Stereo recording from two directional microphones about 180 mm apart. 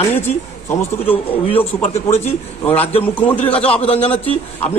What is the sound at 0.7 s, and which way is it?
Speech, 10° left (ahead or behind).